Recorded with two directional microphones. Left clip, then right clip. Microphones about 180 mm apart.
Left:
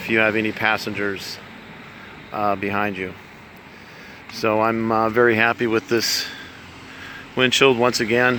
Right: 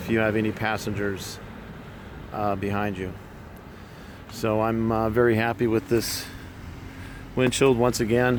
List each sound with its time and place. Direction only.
0.0 s speech: 20° left (ahead or behind)
4.4 s speech: 25° left (ahead or behind); by 6.3 s 5° left (ahead or behind)
7.3 s speech: centre (ahead or behind)